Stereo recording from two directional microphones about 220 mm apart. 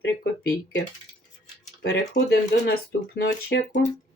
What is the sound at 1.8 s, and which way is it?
Speech, 50° left (ahead or behind).